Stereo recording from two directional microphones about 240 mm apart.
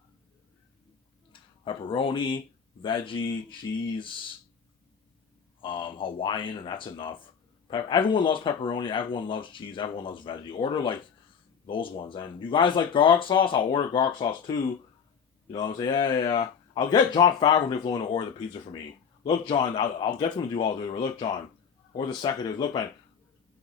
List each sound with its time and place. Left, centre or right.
1.3 s speech: centre
5.5 s speech: left
15.5 s speech: centre